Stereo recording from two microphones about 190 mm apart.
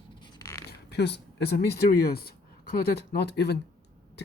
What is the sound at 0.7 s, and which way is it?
Speech, 60° left (ahead or behind).